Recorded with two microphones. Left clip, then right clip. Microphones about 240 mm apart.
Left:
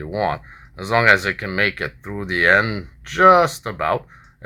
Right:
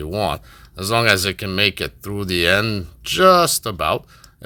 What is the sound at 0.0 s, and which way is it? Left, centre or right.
Speech, right.